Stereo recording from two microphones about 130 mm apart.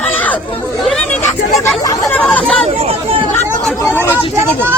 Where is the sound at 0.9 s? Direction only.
5° left (ahead or behind).